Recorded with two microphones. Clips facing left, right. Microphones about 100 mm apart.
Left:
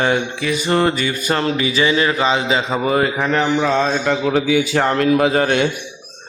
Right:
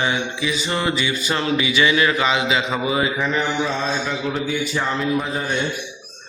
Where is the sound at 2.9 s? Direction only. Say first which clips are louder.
Left 6 dB; 50° left (ahead or behind); by 5.7 s 85° left.